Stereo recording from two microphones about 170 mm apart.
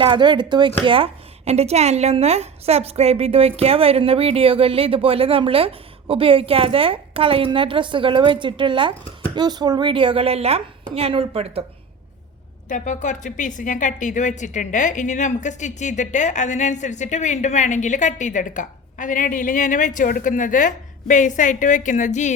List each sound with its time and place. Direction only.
0.0 s a woman's voice: 30° right (ahead or behind)
12.6 s a woman's voice: 50° left (ahead or behind)